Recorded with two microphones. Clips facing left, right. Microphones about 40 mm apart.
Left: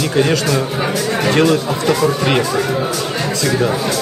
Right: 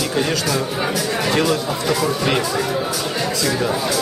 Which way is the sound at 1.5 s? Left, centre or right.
Centre.